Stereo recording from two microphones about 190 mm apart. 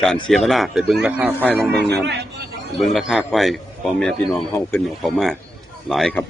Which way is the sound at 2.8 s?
Centre (ahead or behind).